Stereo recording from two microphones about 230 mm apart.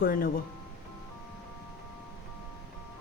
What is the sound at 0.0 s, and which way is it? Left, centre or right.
Speech, left.